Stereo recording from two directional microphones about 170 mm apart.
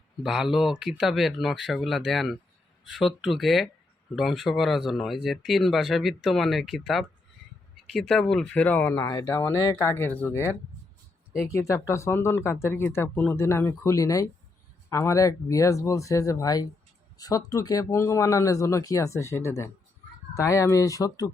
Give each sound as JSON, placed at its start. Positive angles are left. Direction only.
{"t": 0.2, "sound": "speech", "side_deg": 0}
{"t": 11.5, "sound": "speech", "side_deg": 15}